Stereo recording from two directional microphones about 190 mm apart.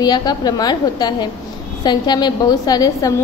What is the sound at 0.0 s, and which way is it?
A woman's voice, 20° left (ahead or behind).